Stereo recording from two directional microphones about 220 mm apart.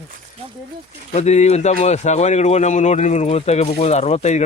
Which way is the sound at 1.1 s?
30° left (ahead or behind).